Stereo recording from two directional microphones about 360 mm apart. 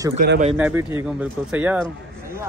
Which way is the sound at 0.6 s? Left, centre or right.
Centre.